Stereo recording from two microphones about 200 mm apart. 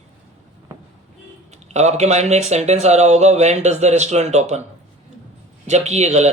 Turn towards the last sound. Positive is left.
turn(degrees=-35)  # may be behind; listen again after turning